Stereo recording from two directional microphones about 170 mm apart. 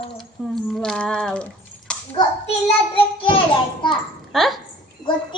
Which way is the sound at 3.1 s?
30° left (ahead or behind).